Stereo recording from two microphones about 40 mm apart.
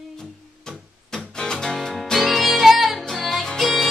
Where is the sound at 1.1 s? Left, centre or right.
Centre.